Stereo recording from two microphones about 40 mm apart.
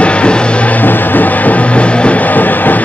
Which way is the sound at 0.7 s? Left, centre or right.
Left.